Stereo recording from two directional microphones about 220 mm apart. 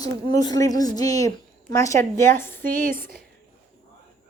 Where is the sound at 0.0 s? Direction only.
20° left (ahead or behind).